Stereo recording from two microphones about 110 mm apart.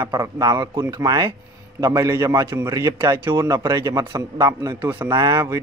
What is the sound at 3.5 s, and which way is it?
Speech, 35° right (ahead or behind).